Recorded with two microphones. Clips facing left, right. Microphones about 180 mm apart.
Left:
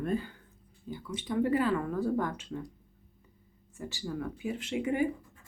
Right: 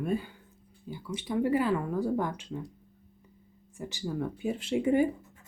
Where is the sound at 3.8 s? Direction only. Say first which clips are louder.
Right 3 dB; 15° right (ahead or behind); by 5.1 s 30° right (ahead or behind).